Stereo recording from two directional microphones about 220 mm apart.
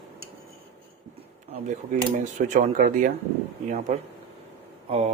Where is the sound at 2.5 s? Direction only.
35° right (ahead or behind).